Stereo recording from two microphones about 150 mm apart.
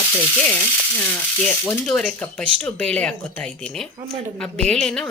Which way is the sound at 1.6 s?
5° left (ahead or behind).